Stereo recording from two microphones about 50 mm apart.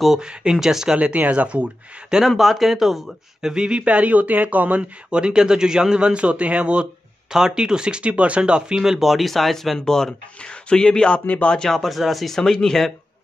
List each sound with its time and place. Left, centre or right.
0.2 s speech: centre
0.9 s speech: right
2.0 s speech: centre
3.4 s speech: centre; by 4.8 s right
5.1 s speech: centre
11.2 s speech: left
11.7 s speech: centre